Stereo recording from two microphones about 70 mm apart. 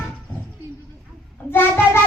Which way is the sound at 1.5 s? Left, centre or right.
Left.